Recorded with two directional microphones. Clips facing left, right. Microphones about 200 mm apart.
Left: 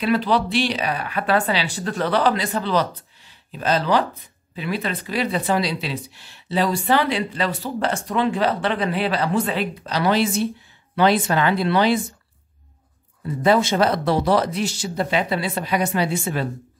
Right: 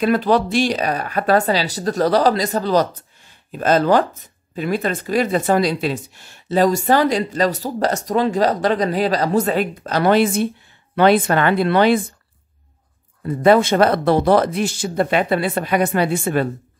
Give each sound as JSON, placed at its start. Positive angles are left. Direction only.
{"t": 0.0, "sound": "speech", "side_deg": -45}
{"t": 13.2, "sound": "speech", "side_deg": -55}